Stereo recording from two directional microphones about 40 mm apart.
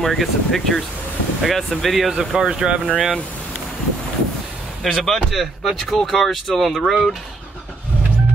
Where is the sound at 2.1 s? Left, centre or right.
Right.